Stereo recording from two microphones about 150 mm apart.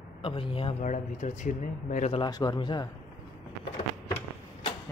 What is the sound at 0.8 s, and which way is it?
Speech, 55° left (ahead or behind).